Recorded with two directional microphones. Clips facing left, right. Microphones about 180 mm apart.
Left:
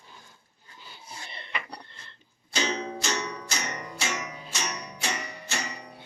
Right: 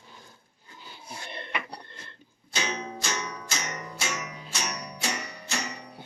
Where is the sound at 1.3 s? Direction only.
55° right (ahead or behind).